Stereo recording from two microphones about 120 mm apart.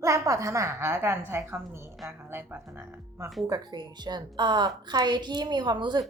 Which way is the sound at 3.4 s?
35° right (ahead or behind).